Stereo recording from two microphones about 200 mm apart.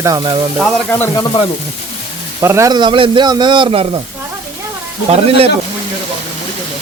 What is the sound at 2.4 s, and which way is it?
Speech, 15° right (ahead or behind).